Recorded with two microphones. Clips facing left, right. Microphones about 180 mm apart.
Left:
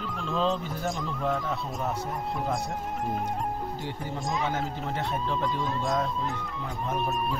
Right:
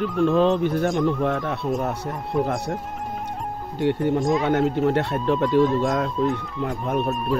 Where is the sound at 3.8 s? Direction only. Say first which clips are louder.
Right 13 dB; 65° right (ahead or behind).